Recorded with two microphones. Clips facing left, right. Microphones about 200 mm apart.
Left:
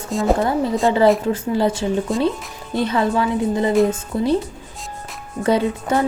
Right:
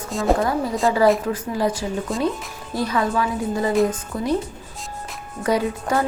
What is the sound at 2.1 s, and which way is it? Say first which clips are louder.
Speech: left 2 dB; centre (ahead or behind).